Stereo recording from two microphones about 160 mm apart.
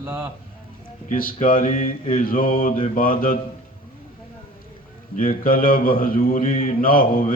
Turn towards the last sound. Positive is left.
turn(degrees=60)  # may be behind; listen again after turning